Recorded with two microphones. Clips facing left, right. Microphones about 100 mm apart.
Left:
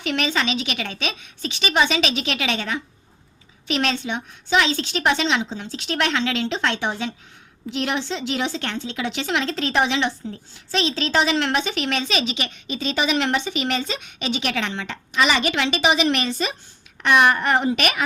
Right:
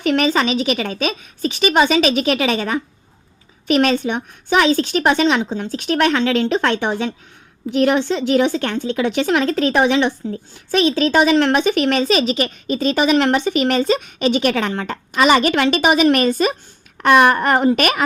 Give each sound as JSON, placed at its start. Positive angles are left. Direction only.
{"t": 0.0, "sound": "a woman's voice", "side_deg": -45}